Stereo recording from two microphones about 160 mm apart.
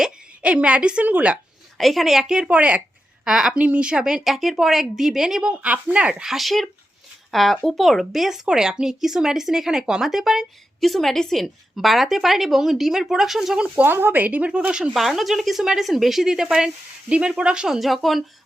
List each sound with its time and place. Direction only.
0.0 s speech: 5° right (ahead or behind)